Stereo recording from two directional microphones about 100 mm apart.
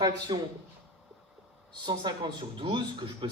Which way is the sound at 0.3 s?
55° right (ahead or behind).